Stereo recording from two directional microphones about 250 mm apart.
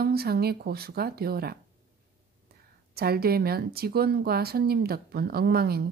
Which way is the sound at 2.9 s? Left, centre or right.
Right.